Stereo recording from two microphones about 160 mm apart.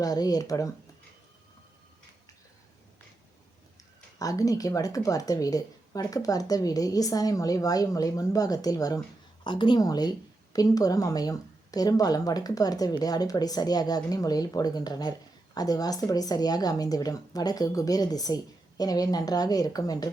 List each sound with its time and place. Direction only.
0.0 s a woman's voice: 25° left (ahead or behind)
4.2 s a woman's voice: 20° left (ahead or behind)